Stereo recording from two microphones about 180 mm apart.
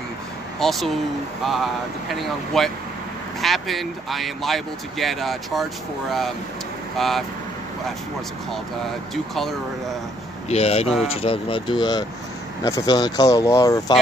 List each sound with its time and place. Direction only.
0.6 s speech: centre (ahead or behind)
7.0 s speech: centre (ahead or behind)
9.1 s speech: centre (ahead or behind)
10.5 s speech: 35° left (ahead or behind); by 13.9 s 20° left (ahead or behind)